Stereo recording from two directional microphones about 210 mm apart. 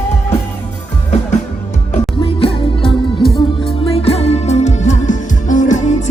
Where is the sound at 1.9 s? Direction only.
25° left (ahead or behind).